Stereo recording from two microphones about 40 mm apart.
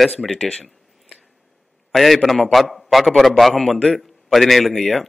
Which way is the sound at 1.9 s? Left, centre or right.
Centre.